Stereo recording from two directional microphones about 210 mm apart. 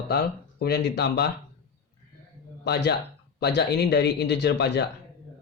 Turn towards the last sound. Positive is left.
turn(degrees=50)  # may be behind; listen again after turning